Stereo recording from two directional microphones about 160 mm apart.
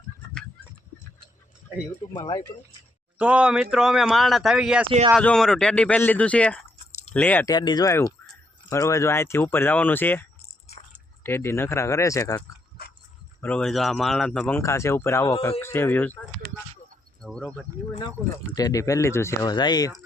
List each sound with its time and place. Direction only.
2.1 s speech: 30° left (ahead or behind)
3.2 s speech: 5° right (ahead or behind)
4.9 s speech: 35° right (ahead or behind)
5.1 s speech: 5° left (ahead or behind)
7.4 s speech: 25° left (ahead or behind)
12.8 s dog: 70° left (ahead or behind)
13.4 s speech: 5° left (ahead or behind)
14.6 s speech: 20° left (ahead or behind)
17.2 s cricket: centre (ahead or behind)
18.5 s speech: 20° left (ahead or behind)